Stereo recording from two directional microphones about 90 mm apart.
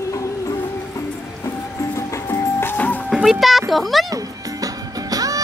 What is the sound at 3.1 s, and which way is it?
Music, 5° right (ahead or behind).